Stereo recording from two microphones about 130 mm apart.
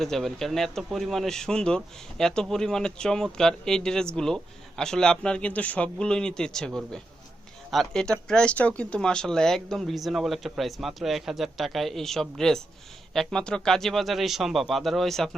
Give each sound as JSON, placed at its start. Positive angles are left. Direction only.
{"t": 0.0, "sound": "speech", "side_deg": 0}